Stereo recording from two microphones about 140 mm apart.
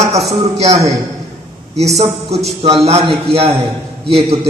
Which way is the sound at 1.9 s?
50° right (ahead or behind).